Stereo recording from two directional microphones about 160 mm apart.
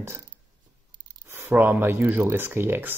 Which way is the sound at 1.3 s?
15° right (ahead or behind).